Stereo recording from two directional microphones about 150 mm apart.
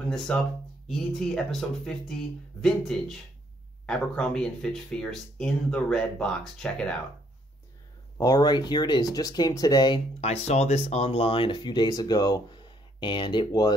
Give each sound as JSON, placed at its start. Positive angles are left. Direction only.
{"t": 0.8, "sound": "speech", "side_deg": 5}
{"t": 8.2, "sound": "speech", "side_deg": 25}
{"t": 10.2, "sound": "speech", "side_deg": 45}